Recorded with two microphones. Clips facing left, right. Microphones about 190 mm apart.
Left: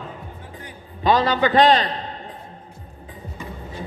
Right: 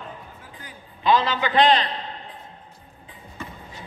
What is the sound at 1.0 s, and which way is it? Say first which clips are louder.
Speech: left 3 dB; 45° left (ahead or behind).